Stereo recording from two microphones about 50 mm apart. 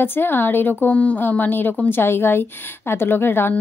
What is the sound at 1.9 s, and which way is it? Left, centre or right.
A woman's voice, left.